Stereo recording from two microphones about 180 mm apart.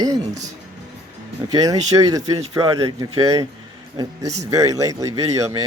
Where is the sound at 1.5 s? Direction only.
20° right (ahead or behind).